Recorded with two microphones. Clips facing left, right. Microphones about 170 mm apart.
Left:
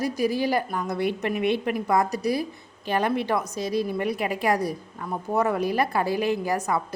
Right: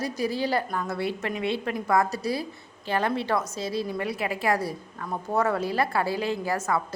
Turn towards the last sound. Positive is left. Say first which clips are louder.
# left 1 dB
turn(degrees=15)  # may be behind; listen again after turning